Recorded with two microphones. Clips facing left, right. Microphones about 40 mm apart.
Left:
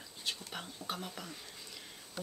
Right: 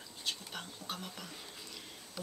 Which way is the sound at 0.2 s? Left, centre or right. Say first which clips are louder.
Even; centre.